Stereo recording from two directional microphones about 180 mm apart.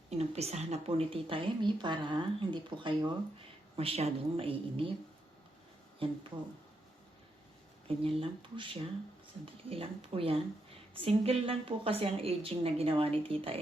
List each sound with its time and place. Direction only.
0.1 s a woman's voice: 35° right (ahead or behind)
6.0 s a woman's voice: 30° right (ahead or behind)
7.9 s a woman's voice: 30° right (ahead or behind)